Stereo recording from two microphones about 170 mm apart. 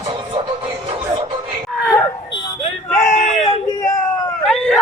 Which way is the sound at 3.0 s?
45° left (ahead or behind).